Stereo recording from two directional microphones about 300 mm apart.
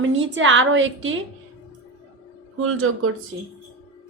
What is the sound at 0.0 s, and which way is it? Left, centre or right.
A woman's voice, right.